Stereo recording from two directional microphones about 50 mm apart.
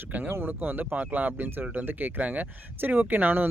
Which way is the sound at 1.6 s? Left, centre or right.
Right.